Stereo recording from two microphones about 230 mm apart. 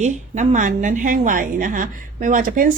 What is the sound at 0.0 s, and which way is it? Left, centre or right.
A woman's voice, right.